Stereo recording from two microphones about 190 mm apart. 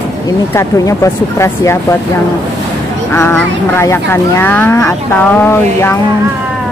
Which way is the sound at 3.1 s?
15° left (ahead or behind).